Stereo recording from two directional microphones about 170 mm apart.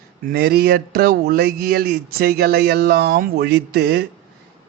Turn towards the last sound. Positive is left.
turn(degrees=-75)  # may be behind; listen again after turning